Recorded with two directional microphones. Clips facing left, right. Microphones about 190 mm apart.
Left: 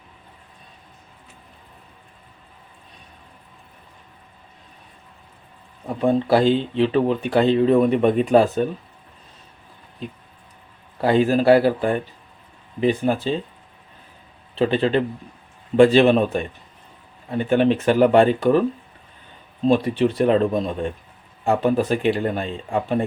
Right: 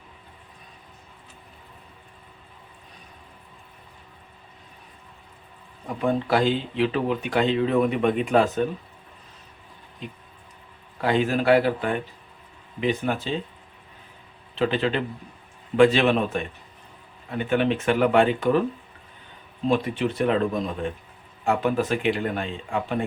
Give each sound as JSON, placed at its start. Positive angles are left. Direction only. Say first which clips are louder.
{"t": 6.0, "sound": "speech", "louder": "left 5 dB", "side_deg": 30}
{"t": 11.0, "sound": "speech", "louder": "left 5 dB", "side_deg": 35}
{"t": 14.5, "sound": "speech", "louder": "left 5 dB", "side_deg": 30}
{"t": 19.6, "sound": "speech", "louder": "left 5 dB", "side_deg": 30}